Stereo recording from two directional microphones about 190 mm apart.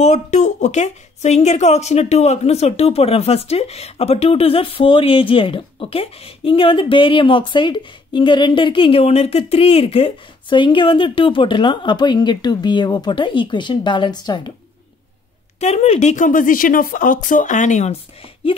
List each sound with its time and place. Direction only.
0.0 s a woman's voice: 40° left (ahead or behind); by 14.5 s 20° left (ahead or behind)
15.6 s a woman's voice: 35° left (ahead or behind)